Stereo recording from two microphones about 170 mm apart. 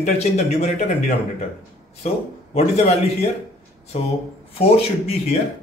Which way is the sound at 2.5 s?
40° left (ahead or behind).